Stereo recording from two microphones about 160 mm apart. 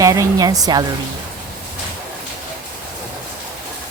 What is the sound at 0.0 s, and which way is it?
Speech, 20° right (ahead or behind).